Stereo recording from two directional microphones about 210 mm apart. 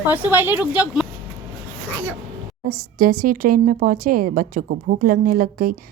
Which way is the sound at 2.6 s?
40° right (ahead or behind).